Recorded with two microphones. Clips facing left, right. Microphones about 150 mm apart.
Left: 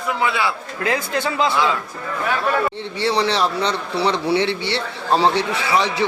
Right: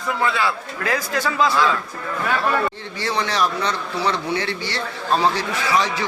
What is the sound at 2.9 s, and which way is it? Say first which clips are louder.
Speech: left 4 dB; 30° left (ahead or behind).